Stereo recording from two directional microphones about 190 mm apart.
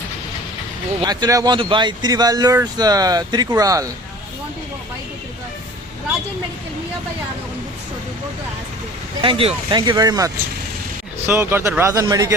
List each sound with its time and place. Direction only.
1.0 s speech: 20° right (ahead or behind)
9.2 s speech: 30° right (ahead or behind)